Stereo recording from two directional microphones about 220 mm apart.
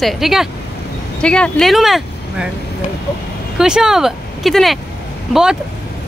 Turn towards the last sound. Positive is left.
turn(degrees=-5)  # may be behind; listen again after turning